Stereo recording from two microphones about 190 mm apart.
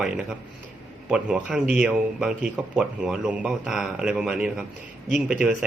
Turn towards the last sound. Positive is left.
turn(degrees=-5)  # may be behind; listen again after turning